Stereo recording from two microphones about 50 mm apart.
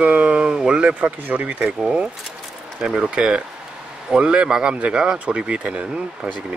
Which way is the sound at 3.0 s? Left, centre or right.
Centre.